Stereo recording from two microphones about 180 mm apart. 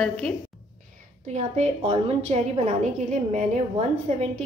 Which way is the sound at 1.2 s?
40° right (ahead or behind).